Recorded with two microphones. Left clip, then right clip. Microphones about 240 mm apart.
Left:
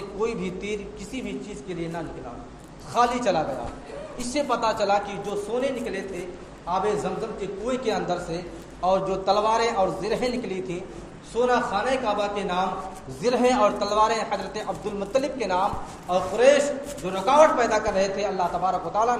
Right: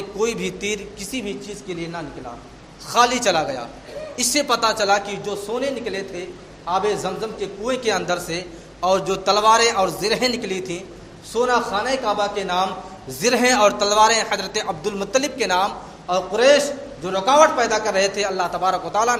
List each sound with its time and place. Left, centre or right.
0.2 s a man's voice: right
2.9 s a man's voice: right